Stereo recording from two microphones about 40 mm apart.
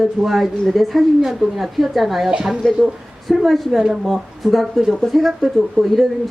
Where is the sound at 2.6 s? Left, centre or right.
Centre.